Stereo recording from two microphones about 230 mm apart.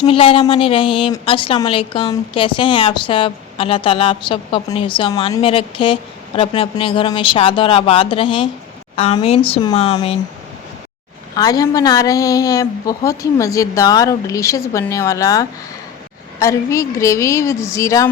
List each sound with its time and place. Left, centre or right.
0.0 s a woman's voice: left
11.3 s a woman's voice: centre